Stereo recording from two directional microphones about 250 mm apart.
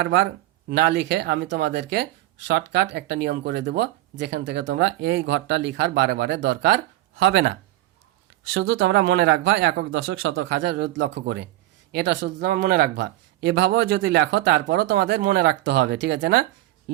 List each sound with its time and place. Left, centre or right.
0.0 s speech: right
8.5 s speech: right